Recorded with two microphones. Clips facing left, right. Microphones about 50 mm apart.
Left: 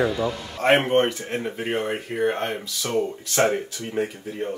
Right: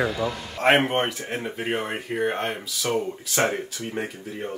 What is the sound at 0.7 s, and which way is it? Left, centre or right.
Speech, centre.